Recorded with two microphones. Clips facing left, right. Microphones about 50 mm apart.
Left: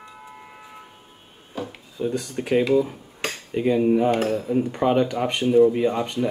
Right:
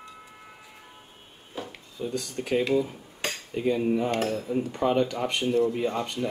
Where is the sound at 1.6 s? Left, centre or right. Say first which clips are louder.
Left 5 dB; centre.